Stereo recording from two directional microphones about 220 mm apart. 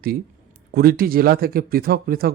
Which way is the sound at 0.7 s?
45° right (ahead or behind).